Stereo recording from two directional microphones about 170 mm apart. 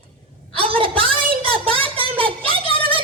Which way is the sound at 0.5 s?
30° right (ahead or behind).